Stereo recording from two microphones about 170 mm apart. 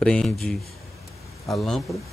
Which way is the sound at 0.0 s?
5° left (ahead or behind).